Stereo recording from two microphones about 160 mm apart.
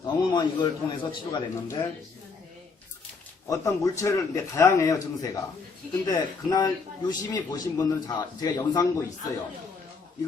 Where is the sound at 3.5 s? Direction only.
20° left (ahead or behind).